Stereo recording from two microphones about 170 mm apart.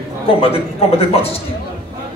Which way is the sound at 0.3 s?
35° left (ahead or behind).